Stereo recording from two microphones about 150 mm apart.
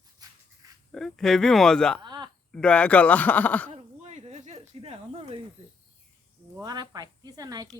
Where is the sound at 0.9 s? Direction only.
5° left (ahead or behind).